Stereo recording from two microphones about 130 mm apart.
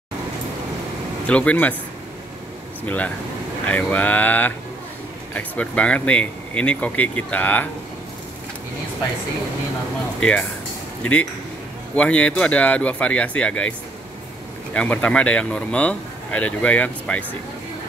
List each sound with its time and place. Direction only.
1.2 s speech: 10° left (ahead or behind)
2.8 s speech: 10° left (ahead or behind)
11.9 s speech: 10° left (ahead or behind)